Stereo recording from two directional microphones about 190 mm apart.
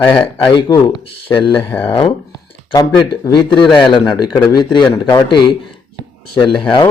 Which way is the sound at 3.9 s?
25° left (ahead or behind).